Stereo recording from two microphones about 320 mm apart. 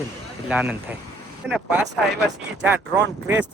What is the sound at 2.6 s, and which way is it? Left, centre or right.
Speech, centre.